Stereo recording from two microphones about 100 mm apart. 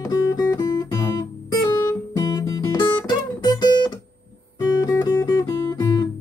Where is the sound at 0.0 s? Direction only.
35° left (ahead or behind).